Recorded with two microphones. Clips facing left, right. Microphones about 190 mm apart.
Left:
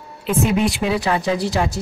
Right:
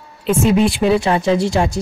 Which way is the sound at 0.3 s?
30° right (ahead or behind).